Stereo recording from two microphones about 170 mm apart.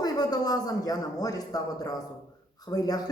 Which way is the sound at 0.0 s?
20° left (ahead or behind).